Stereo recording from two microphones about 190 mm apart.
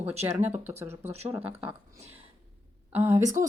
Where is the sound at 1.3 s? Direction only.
10° right (ahead or behind).